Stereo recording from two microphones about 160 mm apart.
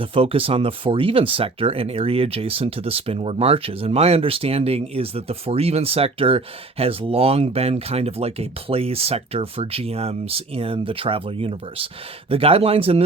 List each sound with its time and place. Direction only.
0.0 s speech: 35° right (ahead or behind)